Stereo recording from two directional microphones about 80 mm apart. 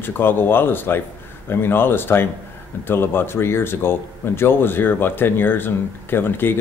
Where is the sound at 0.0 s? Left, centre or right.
Left.